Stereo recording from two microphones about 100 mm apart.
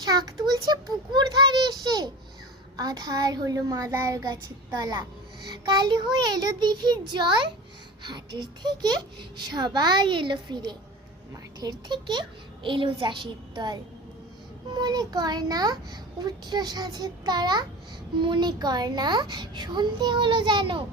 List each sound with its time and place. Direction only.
0.0 s a child's voice: 40° right (ahead or behind)
6.3 s a child's voice: 45° right (ahead or behind)